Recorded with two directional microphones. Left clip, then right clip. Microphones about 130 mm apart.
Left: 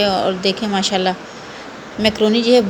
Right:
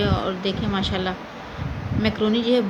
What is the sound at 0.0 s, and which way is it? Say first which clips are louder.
A woman's voice: left 8 dB; 20° left (ahead or behind).